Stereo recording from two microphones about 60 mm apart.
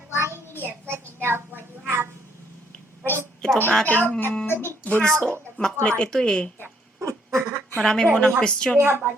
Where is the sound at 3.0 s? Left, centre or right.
Right.